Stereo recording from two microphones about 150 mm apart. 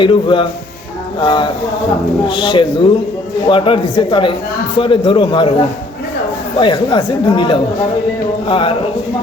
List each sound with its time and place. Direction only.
0.0 s speech: 35° left (ahead or behind)